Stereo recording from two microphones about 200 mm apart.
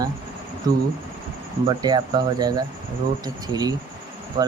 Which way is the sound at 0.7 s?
20° right (ahead or behind).